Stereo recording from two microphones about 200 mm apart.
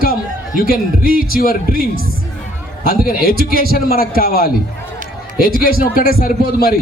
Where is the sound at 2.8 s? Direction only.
45° left (ahead or behind).